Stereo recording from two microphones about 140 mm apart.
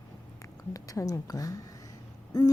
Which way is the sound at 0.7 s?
25° left (ahead or behind).